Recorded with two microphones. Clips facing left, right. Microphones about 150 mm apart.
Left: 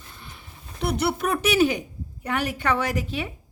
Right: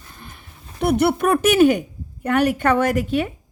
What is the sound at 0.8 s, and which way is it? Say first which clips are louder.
A woman's voice: right 7 dB; 55° right (ahead or behind).